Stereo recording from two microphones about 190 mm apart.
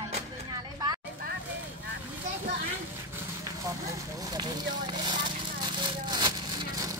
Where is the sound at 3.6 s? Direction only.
15° right (ahead or behind).